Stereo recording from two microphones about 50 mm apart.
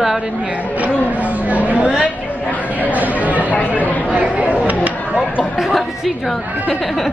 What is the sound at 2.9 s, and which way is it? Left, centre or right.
Speech, right.